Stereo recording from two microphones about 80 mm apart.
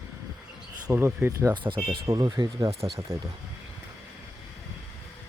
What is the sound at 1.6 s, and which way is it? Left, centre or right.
Speech, right.